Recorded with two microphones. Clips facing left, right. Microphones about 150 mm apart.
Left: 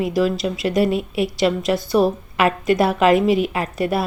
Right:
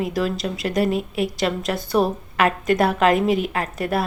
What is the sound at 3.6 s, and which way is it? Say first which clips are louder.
Speech: left 3 dB; 45° right (ahead or behind).